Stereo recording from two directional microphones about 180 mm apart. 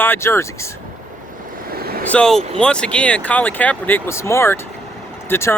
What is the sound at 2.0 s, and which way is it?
Speech, 5° left (ahead or behind).